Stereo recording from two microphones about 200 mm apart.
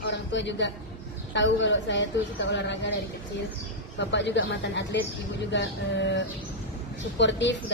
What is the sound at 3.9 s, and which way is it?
A woman's voice, 60° left (ahead or behind).